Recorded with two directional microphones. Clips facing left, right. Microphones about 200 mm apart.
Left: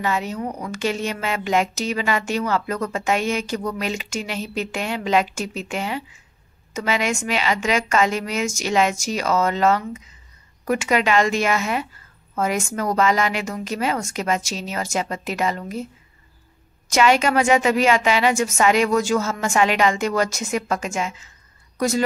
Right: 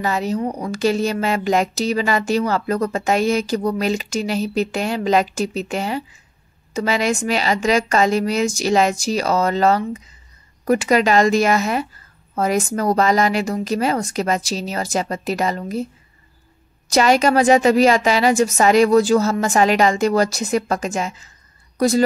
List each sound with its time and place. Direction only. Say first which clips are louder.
0.0 s a woman's voice: right 4 dB; 35° right (ahead or behind)
16.9 s a woman's voice: right 3 dB; 35° right (ahead or behind)